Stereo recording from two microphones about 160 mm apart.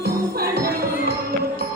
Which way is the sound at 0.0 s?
75° right (ahead or behind).